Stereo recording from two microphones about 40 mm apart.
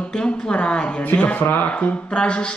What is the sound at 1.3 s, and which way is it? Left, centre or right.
Speech, left.